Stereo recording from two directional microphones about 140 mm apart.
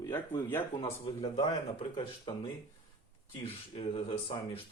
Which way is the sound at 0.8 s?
40° left (ahead or behind).